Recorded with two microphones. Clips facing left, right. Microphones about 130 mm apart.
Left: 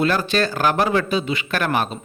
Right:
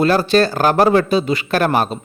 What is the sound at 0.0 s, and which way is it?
Speech, 35° right (ahead or behind).